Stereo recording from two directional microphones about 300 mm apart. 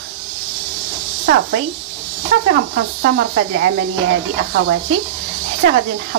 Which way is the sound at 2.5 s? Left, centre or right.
Right.